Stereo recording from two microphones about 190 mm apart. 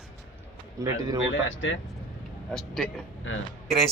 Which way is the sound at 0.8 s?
15° right (ahead or behind).